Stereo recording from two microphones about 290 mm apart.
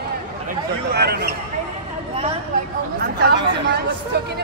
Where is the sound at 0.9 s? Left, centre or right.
Right.